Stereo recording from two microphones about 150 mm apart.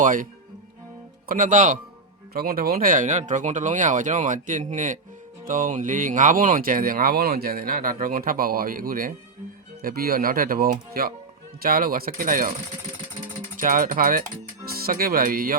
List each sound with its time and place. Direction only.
0.0 s speech: 60° right (ahead or behind)
1.3 s speech: 55° right (ahead or behind)
2.3 s speech: 85° right; by 12.5 s 60° right (ahead or behind)
13.6 s speech: 60° right (ahead or behind)
14.7 s speech: 85° right